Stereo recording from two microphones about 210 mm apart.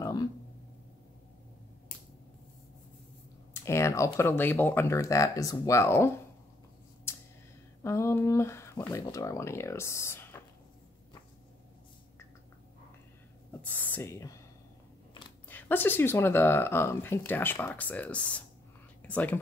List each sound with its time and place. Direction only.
0.0 s a sound: 20° left (ahead or behind)
3.6 s speech: 15° left (ahead or behind)
7.1 s a sound: 10° left (ahead or behind)
7.8 s speech: 15° left (ahead or behind)
13.5 s speech: 10° left (ahead or behind)
15.4 s speech: 10° left (ahead or behind)